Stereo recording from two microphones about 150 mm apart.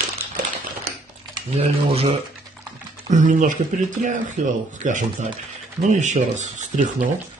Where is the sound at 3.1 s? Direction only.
60° right (ahead or behind).